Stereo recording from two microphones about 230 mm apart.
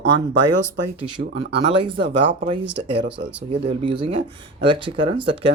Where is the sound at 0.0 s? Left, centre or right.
Right.